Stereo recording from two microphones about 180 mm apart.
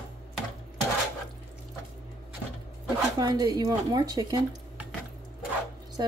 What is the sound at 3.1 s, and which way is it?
Speech, 20° right (ahead or behind).